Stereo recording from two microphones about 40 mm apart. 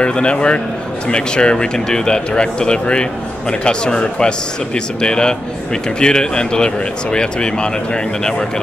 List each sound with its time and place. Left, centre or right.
0.0 s speech: left